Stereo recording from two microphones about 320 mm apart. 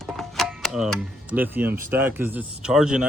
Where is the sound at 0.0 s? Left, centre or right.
Centre.